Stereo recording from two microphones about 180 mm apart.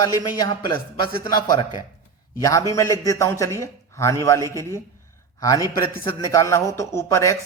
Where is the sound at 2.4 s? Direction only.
20° left (ahead or behind).